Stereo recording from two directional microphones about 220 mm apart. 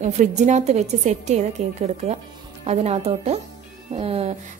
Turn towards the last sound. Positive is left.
turn(degrees=-30)  # may be behind; listen again after turning